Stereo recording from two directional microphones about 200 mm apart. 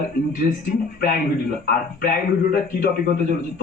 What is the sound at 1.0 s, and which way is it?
A man's voice, 45° left (ahead or behind).